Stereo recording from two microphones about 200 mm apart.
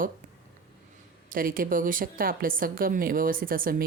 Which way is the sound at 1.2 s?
45° right (ahead or behind).